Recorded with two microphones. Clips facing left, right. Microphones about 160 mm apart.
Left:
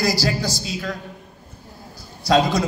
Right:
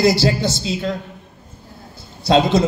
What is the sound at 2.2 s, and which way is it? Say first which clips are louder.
Speech: right 3 dB; 25° right (ahead or behind).